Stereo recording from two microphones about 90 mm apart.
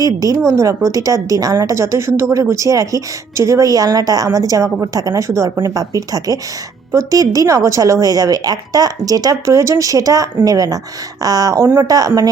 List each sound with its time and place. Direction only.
0.0 s a woman's voice: 40° right (ahead or behind)